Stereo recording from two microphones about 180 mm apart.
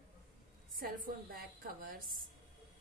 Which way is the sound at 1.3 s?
55° right (ahead or behind).